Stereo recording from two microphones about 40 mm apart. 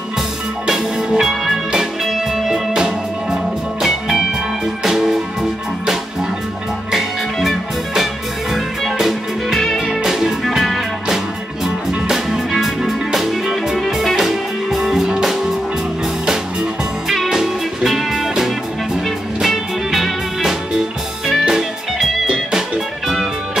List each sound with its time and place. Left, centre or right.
0.7 s music: centre
4.8 s music: centre
7.3 s music: centre
10.5 s music: centre
12.1 s music: centre
17.3 s music: centre
22.2 s music: right
23.0 s music: centre